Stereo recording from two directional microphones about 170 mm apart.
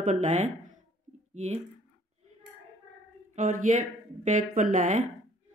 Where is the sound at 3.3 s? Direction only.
50° right (ahead or behind).